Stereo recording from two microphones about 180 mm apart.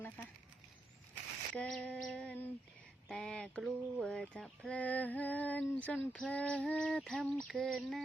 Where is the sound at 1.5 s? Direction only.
5° left (ahead or behind).